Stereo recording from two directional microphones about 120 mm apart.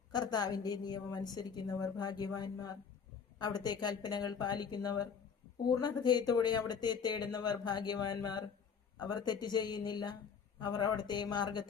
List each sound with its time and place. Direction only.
0.1 s speech: 35° left (ahead or behind)